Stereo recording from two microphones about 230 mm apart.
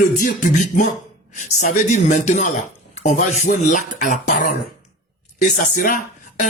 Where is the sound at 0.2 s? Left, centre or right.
Left.